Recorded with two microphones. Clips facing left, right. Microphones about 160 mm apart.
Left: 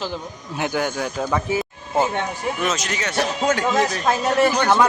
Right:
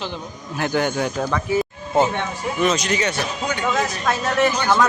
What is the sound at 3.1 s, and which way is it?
Speech, 80° left.